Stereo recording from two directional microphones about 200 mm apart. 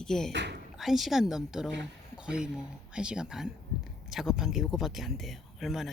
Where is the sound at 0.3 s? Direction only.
60° right (ahead or behind).